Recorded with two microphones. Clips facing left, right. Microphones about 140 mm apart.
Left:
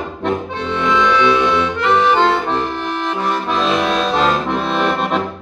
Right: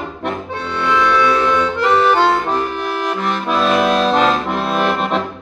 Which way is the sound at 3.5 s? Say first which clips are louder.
Right 4 dB; 5° right (ahead or behind).